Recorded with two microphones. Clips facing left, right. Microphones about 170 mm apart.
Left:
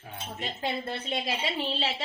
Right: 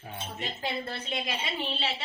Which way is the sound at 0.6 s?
25° left (ahead or behind).